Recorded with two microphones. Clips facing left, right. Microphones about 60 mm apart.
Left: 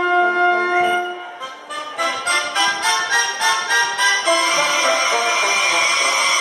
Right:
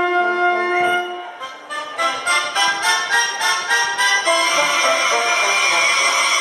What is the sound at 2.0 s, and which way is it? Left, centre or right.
Music, centre.